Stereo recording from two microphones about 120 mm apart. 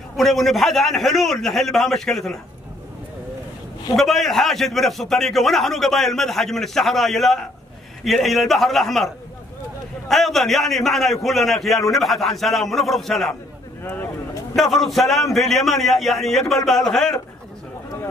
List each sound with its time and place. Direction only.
0.2 s a man's voice: centre (ahead or behind)
3.9 s a man's voice: centre (ahead or behind)
13.8 s a sound: 20° left (ahead or behind)
14.5 s a man's voice: centre (ahead or behind)